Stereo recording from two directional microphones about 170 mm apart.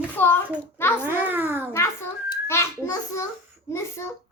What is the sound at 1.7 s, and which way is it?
A child's voice, 15° left (ahead or behind).